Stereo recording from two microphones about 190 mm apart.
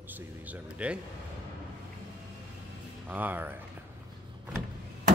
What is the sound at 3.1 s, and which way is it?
Speech, 10° right (ahead or behind).